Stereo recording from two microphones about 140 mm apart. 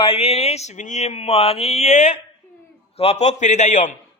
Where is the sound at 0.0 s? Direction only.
45° left (ahead or behind).